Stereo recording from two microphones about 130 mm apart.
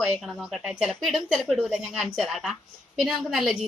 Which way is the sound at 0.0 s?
5° right (ahead or behind).